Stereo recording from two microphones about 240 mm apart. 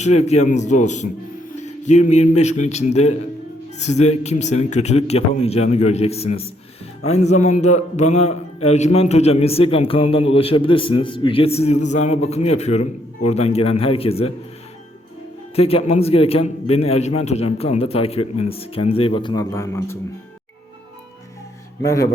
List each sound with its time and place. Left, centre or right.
0.0 s a man's voice: left
15.5 s a man's voice: left
21.8 s a man's voice: centre